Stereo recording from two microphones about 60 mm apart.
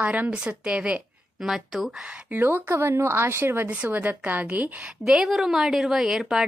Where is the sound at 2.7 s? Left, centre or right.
Right.